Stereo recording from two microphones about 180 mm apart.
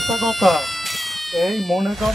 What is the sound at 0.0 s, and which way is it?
Speech, centre (ahead or behind).